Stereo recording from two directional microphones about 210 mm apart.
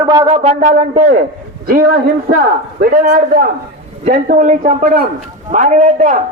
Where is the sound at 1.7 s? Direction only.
45° right (ahead or behind).